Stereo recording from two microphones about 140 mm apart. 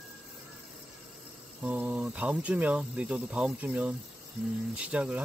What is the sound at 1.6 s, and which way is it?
Speech, 10° right (ahead or behind).